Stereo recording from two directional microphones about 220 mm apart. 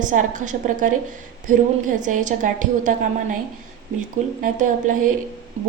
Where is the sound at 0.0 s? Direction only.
35° right (ahead or behind).